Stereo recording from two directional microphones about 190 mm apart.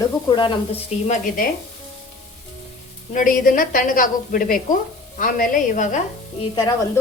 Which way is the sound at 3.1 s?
45° left (ahead or behind).